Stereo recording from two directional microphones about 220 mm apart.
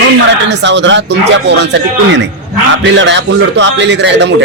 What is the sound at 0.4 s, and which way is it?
A man's voice, 55° right (ahead or behind).